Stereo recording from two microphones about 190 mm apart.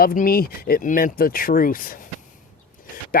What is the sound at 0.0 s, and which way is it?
Speech, 50° left (ahead or behind).